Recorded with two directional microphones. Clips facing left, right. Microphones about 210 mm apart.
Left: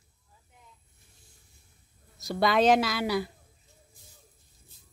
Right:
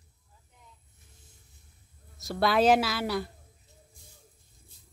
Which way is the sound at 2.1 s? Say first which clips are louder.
Left 1 dB; centre (ahead or behind).